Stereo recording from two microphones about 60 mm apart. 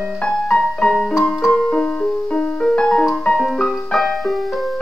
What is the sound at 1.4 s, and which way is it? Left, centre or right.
Keyboard, centre.